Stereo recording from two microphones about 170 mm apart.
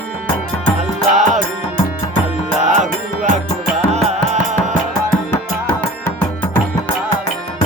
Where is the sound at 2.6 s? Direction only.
45° right (ahead or behind).